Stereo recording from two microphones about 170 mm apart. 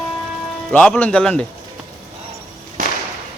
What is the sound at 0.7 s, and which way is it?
Speech, 5° left (ahead or behind).